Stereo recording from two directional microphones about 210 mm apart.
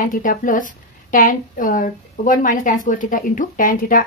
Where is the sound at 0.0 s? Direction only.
40° left (ahead or behind).